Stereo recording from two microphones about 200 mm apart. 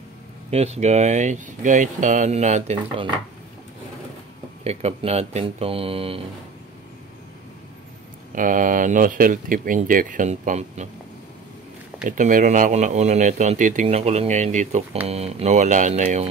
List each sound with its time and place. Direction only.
0.5 s speech: 30° right (ahead or behind)
4.6 s speech: 30° right (ahead or behind)
8.4 s speech: 40° right (ahead or behind)
12.0 s speech: 40° right (ahead or behind)